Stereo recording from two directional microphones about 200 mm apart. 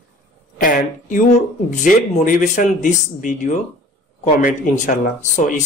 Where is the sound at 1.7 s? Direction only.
40° left (ahead or behind).